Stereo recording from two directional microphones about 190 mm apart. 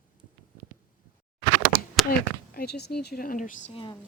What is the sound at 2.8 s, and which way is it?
Speech, 55° left (ahead or behind).